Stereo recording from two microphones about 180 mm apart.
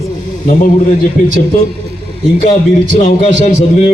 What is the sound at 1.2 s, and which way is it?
Speech, 50° left (ahead or behind).